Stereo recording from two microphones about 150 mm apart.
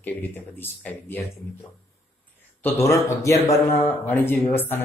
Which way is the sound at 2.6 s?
15° left (ahead or behind).